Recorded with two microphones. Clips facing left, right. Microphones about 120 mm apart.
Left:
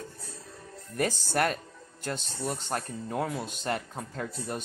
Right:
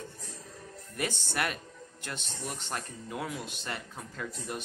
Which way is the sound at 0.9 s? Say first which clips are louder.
Left 6 dB; 40° left (ahead or behind).